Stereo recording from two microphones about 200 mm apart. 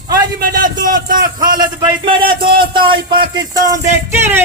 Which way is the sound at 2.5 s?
50° right (ahead or behind).